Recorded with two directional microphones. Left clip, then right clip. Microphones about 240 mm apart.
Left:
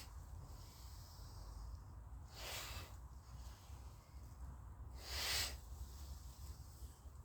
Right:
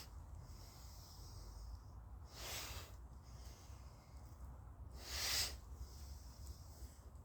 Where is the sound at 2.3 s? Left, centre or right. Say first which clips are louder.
Even; centre.